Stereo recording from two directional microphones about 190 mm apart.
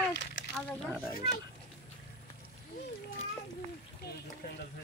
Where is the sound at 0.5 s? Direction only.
5° right (ahead or behind).